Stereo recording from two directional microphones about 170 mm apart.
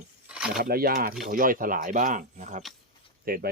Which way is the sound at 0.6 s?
60° right (ahead or behind).